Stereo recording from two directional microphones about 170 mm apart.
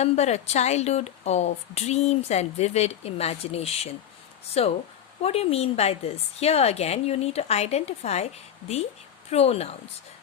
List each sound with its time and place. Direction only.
0.0 s speech: 40° left (ahead or behind)